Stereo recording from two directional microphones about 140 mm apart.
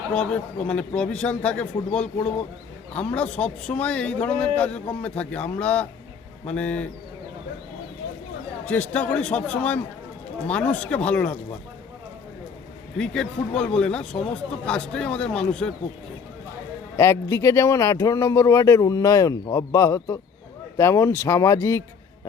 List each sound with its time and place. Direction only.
0.1 s speech: 10° left (ahead or behind)
8.6 s speech: 10° left (ahead or behind)
13.0 s speech: 5° left (ahead or behind)
17.0 s speech: 20° left (ahead or behind)